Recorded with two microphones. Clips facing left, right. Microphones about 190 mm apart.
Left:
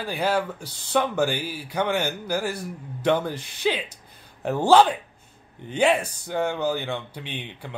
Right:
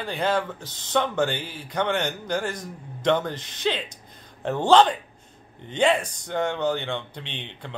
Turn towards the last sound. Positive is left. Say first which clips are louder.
# left 2 dB
turn(degrees=10)  # may be behind; listen again after turning